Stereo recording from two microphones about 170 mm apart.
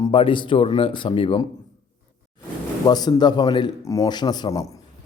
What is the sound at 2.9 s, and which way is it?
A man's voice, 25° left (ahead or behind).